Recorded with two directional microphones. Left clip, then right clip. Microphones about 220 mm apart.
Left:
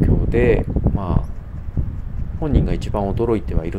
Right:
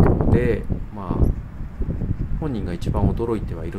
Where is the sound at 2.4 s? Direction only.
10° left (ahead or behind).